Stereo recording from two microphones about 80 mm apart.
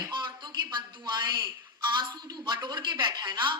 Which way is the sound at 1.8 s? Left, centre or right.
Right.